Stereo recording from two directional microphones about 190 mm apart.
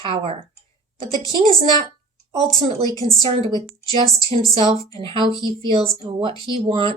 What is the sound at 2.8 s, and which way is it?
Speech, 20° left (ahead or behind).